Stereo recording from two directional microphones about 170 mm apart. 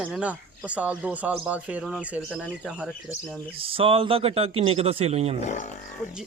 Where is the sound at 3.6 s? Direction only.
30° right (ahead or behind).